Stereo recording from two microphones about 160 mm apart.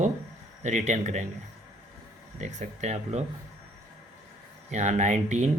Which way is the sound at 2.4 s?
45° right (ahead or behind).